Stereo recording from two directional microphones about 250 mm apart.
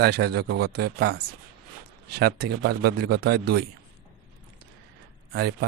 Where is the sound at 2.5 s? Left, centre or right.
Right.